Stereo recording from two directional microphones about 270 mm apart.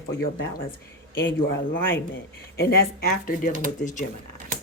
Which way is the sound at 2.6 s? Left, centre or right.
Left.